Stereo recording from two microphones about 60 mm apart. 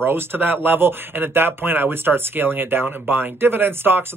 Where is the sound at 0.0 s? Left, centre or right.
Right.